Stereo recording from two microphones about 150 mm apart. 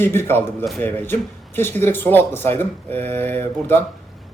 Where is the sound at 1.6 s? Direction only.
15° left (ahead or behind).